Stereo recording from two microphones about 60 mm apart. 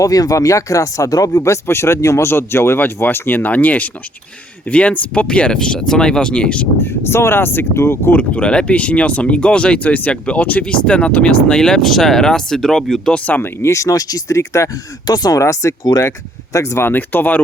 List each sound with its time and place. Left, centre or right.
0.0 s speech: left
1.4 s speech: left; by 6.7 s centre
6.8 s speech: left
8.1 s speech: left; by 13.1 s centre
13.1 s speech: left
13.6 s speech: left
16.8 s speech: left